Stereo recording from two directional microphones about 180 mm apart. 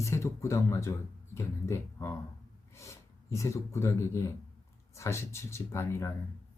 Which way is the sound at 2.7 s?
15° left (ahead or behind).